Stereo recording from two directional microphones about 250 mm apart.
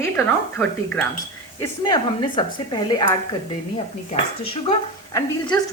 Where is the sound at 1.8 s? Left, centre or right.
Centre.